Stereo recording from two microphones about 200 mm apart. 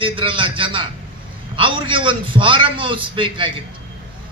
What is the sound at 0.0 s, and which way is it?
A man's voice, 25° right (ahead or behind).